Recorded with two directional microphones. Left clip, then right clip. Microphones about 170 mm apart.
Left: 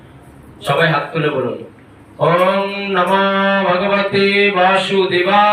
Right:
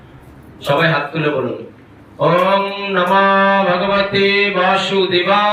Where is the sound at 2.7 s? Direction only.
15° right (ahead or behind).